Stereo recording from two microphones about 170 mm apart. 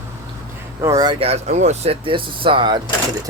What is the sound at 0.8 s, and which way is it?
Speech, 20° right (ahead or behind).